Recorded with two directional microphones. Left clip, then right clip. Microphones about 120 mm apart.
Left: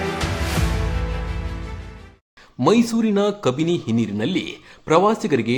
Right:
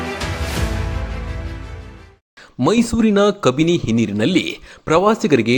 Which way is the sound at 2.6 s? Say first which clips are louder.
Right 1 dB; 45° right (ahead or behind).